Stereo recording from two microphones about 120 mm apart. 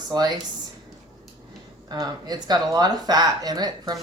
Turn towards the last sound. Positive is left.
turn(degrees=-35)  # may be behind; listen again after turning